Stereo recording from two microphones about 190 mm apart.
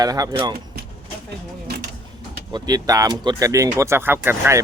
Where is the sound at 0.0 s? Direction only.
20° right (ahead or behind).